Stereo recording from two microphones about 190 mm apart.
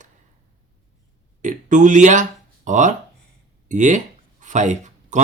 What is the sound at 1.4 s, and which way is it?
A man's voice, 40° right (ahead or behind).